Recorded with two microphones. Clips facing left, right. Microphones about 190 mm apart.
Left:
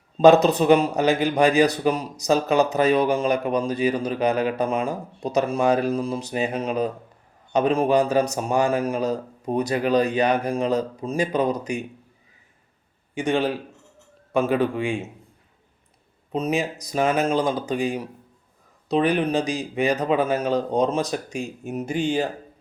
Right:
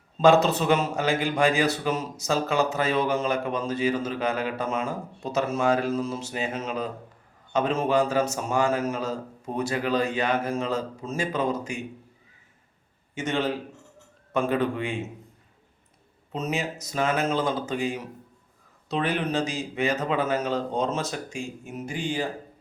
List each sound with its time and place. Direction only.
0.2 s a man's voice: 15° left (ahead or behind)
13.1 s a man's voice: 15° left (ahead or behind)
16.3 s a man's voice: 15° left (ahead or behind)